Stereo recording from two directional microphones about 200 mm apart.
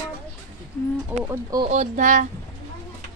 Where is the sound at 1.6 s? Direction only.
35° right (ahead or behind).